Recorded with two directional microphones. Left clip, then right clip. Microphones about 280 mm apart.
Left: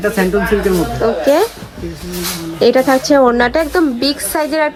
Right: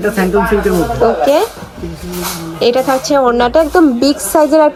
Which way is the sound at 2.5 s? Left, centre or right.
Centre.